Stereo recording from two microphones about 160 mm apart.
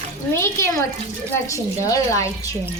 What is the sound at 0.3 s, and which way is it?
A woman's voice, 15° left (ahead or behind).